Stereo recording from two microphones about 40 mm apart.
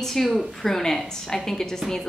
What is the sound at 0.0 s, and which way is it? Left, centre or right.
A woman's voice, centre.